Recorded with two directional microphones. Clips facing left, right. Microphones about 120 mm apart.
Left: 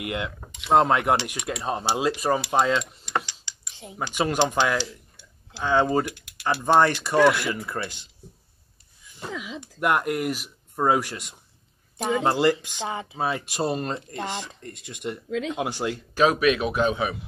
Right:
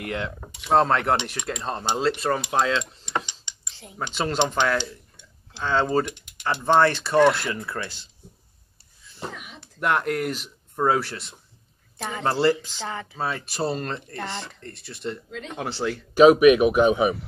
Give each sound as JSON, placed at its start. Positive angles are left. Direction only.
{"t": 0.0, "sound": "speech", "side_deg": 10}
{"t": 3.7, "sound": "speech", "side_deg": 20}
{"t": 9.3, "sound": "a sound", "side_deg": 90}
{"t": 9.6, "sound": "speech", "side_deg": 10}
{"t": 16.2, "sound": "speech", "side_deg": -15}